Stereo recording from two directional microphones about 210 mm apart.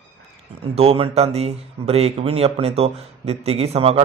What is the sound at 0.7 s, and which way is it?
Speech, 30° right (ahead or behind).